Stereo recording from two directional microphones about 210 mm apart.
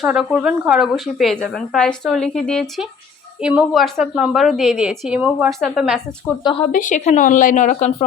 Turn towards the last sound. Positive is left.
turn(degrees=35)  # may be behind; listen again after turning